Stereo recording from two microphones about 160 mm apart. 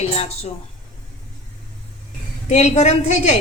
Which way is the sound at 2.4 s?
45° left (ahead or behind).